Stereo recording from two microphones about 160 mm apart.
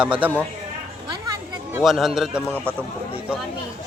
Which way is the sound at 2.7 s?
15° right (ahead or behind).